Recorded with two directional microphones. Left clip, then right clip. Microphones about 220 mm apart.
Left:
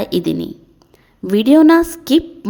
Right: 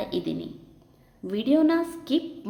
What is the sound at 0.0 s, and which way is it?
A woman's voice, 50° left (ahead or behind).